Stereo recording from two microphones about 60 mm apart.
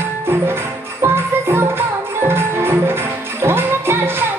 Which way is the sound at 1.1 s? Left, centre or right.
Right.